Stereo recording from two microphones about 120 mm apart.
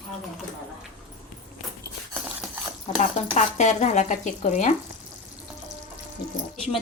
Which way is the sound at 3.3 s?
75° left (ahead or behind).